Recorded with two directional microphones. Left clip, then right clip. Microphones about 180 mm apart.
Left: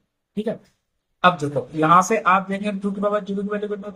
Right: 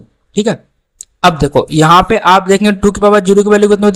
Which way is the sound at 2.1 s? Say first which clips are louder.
Right 11 dB; 65° right (ahead or behind).